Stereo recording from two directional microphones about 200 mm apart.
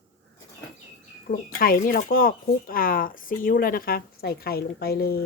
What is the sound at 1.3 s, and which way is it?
Speech, 50° left (ahead or behind).